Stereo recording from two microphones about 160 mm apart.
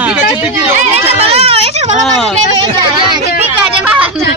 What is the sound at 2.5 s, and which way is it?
Speech, 30° right (ahead or behind).